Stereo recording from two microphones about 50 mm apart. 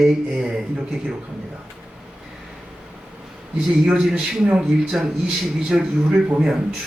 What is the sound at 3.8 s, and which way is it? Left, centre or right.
A man's voice, centre.